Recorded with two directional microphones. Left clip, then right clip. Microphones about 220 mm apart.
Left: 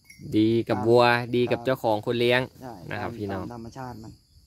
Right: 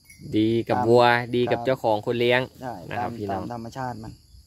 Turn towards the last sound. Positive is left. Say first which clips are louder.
# right 6 dB
turn(degrees=-45)  # may be behind; listen again after turning